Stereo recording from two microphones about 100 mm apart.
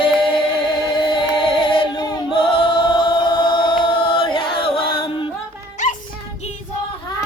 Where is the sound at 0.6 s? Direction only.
50° left (ahead or behind).